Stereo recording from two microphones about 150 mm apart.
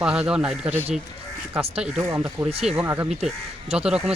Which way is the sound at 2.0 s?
20° right (ahead or behind).